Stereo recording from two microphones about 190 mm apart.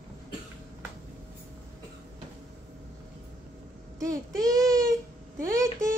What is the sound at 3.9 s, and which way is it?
Child singing, 20° right (ahead or behind).